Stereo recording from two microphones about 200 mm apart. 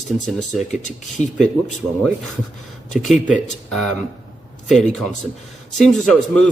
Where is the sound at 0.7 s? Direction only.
35° left (ahead or behind).